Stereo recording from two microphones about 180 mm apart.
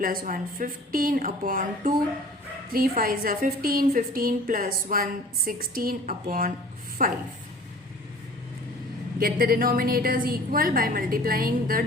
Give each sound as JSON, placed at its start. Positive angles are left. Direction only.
{"t": 0.0, "sound": "a woman's voice", "side_deg": -50}
{"t": 3.0, "sound": "a woman's voice", "side_deg": -50}
{"t": 9.1, "sound": "a woman's voice", "side_deg": -55}